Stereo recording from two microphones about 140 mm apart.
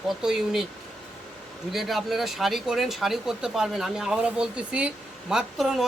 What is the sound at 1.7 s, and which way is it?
Speech, centre (ahead or behind).